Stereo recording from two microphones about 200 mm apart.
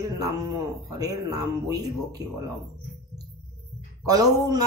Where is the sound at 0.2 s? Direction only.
20° right (ahead or behind).